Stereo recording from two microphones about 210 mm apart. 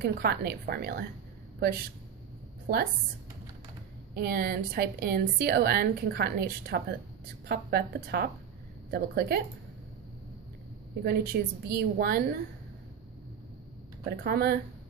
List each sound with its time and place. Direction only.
0.0 s a woman's voice: 50° right (ahead or behind)
2.6 s a woman's voice: 45° right (ahead or behind)
4.1 s a woman's voice: 45° right (ahead or behind)
11.1 s a woman's voice: 50° right (ahead or behind)
14.1 s a woman's voice: 45° right (ahead or behind)